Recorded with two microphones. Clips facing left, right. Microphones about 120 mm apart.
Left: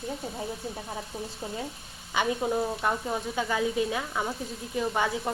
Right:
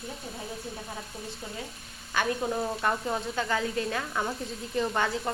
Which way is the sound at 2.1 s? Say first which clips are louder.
Left 2 dB; 10° left (ahead or behind).